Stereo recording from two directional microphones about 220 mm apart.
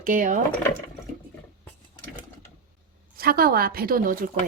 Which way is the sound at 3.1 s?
45° right (ahead or behind).